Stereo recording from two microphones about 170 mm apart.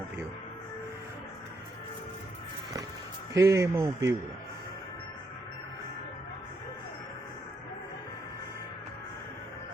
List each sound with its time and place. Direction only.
3.3 s speech: 20° right (ahead or behind)